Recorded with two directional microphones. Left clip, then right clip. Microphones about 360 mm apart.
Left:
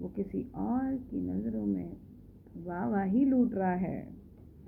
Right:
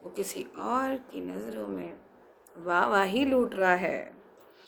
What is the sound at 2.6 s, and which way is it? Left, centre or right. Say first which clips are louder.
A woman's voice: right 10 dB; centre.